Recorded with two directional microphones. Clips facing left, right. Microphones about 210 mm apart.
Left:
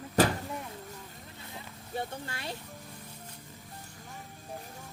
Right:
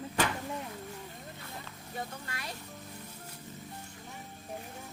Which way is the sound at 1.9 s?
30° left (ahead or behind).